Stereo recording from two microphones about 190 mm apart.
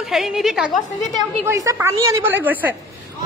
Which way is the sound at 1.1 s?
15° right (ahead or behind).